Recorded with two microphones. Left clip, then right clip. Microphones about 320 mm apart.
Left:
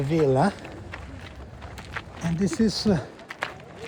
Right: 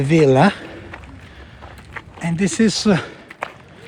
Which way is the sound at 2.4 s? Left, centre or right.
Centre.